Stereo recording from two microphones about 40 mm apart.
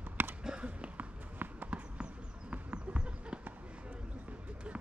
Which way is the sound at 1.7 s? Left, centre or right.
Right.